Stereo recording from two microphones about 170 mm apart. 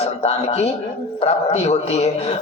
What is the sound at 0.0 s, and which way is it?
Speech, 40° left (ahead or behind).